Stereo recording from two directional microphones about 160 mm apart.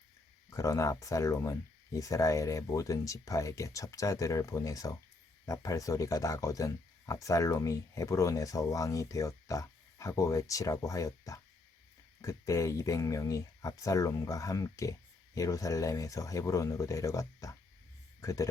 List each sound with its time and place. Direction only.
0.5 s a man's voice: 20° left (ahead or behind)